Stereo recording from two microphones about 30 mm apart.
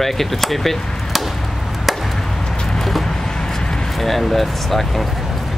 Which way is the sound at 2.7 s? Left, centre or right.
Centre.